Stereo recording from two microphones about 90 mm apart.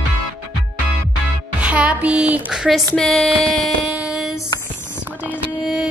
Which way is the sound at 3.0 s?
10° left (ahead or behind).